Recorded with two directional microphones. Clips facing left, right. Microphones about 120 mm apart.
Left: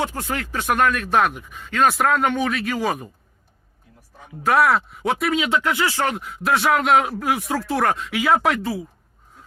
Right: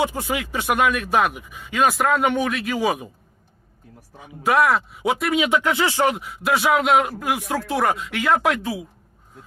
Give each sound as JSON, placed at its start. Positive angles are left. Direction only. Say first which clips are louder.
{"t": 0.0, "sound": "speech", "louder": "right 2 dB", "side_deg": -10}
{"t": 3.9, "sound": "speech", "louder": "right 6 dB", "side_deg": -50}
{"t": 4.2, "sound": "speech", "louder": "even", "side_deg": 0}
{"t": 5.3, "sound": "speech", "louder": "right 1 dB", "side_deg": -15}
{"t": 6.1, "sound": "speech", "louder": "left 1 dB", "side_deg": 0}